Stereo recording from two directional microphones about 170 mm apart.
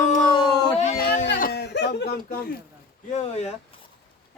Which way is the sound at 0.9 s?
60° left (ahead or behind).